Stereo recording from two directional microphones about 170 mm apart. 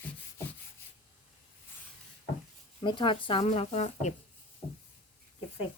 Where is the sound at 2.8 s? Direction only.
25° left (ahead or behind).